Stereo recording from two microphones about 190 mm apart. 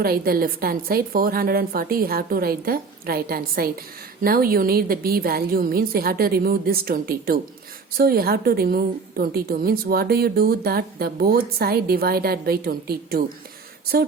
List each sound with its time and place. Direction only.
0.0 s a woman's voice: 50° right (ahead or behind)